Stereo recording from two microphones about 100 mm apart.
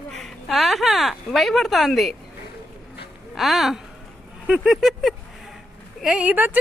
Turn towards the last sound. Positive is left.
turn(degrees=-15)  # may be behind; listen again after turning